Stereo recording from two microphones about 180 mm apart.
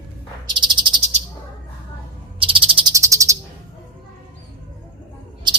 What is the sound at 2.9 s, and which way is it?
Bird, 15° right (ahead or behind).